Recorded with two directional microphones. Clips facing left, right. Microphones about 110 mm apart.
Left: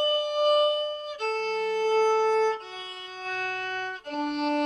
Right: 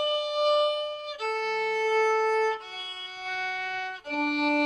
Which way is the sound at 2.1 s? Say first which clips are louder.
Left 2 dB; centre (ahead or behind).